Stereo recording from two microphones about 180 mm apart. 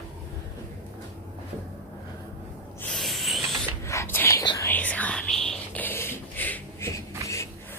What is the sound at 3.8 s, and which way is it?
Whispering, 15° left (ahead or behind).